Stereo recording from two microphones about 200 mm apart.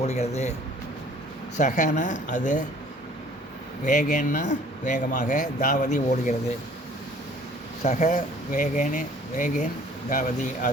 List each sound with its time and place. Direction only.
0.0 s speech: 30° left (ahead or behind)
1.5 s speech: 35° left (ahead or behind)
3.8 s speech: 40° left (ahead or behind)
7.8 s speech: 35° left (ahead or behind)